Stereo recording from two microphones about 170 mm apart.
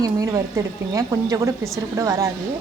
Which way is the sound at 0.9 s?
20° right (ahead or behind).